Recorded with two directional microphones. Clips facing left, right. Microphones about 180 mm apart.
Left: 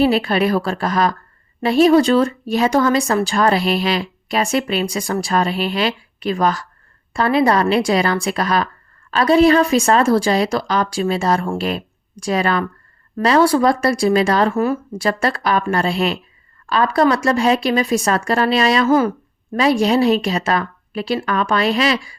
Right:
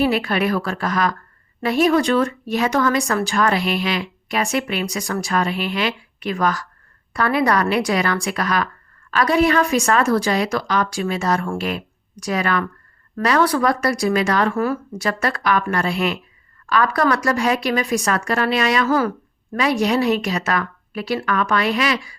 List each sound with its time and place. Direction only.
0.0 s a woman's voice: 30° left (ahead or behind)